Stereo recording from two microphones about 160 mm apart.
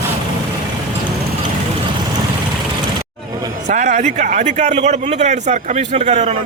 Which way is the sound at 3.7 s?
50° right (ahead or behind).